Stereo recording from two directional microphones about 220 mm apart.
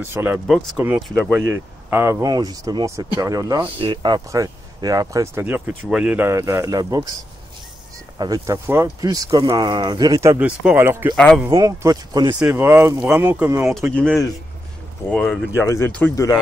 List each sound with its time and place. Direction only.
0.0 s speech: 10° right (ahead or behind)
8.2 s speech: 15° right (ahead or behind)
10.4 s speech: 5° right (ahead or behind)
11.1 s speech: 5° left (ahead or behind)
11.4 s speech: 15° right (ahead or behind)
15.0 s speech: centre (ahead or behind)
15.6 s speech: 10° left (ahead or behind)